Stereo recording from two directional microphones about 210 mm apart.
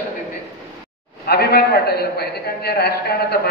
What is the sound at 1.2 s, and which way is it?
A man's voice, 50° left (ahead or behind).